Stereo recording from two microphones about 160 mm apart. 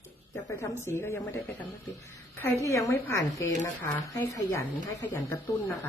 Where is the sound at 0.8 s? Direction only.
15° left (ahead or behind).